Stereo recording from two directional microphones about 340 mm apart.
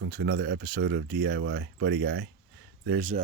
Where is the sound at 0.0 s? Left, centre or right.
Right.